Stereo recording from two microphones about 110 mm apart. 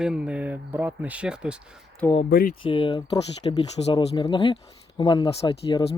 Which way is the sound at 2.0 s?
15° left (ahead or behind).